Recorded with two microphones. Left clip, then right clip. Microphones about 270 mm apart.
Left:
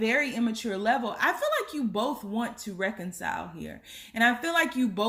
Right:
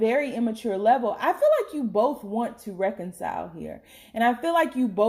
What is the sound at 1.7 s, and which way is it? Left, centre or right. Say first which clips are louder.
Speech: right 2 dB; left.